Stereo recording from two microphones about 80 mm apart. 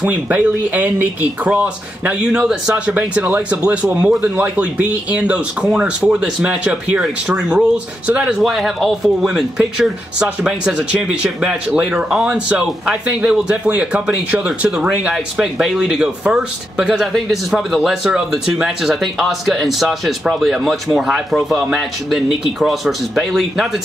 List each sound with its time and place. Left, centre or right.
0.0 s speech: centre
2.7 s speech: centre
8.4 s speech: centre